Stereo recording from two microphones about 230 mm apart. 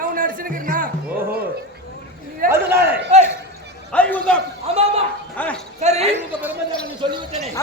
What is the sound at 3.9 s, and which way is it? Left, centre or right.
Speech, centre.